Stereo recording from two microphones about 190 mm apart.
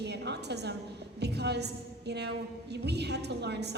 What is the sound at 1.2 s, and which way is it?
A woman's voice, 60° right (ahead or behind).